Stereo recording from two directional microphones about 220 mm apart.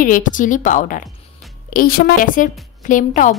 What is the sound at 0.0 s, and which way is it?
A woman's voice, 35° left (ahead or behind).